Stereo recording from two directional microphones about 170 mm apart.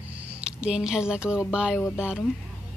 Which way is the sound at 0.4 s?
5° right (ahead or behind).